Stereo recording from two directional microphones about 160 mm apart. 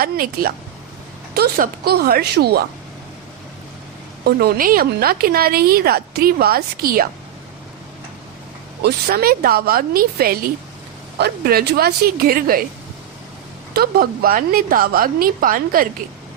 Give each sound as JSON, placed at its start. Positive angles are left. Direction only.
{"t": 0.0, "sound": "a woman's voice", "side_deg": -65}
{"t": 4.2, "sound": "a woman's voice", "side_deg": -80}
{"t": 8.8, "sound": "a woman's voice", "side_deg": -70}
{"t": 13.7, "sound": "a woman's voice", "side_deg": -70}